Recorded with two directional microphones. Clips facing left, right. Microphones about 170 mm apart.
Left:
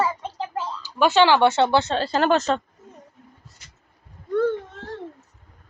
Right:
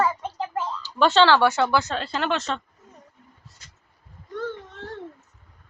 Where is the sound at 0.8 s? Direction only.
10° left (ahead or behind); by 2.6 s 40° left (ahead or behind).